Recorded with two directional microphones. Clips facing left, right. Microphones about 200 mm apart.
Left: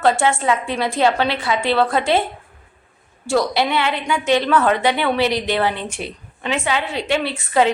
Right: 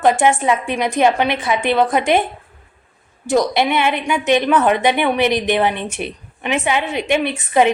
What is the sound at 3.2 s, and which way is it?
A woman's voice, 20° right (ahead or behind).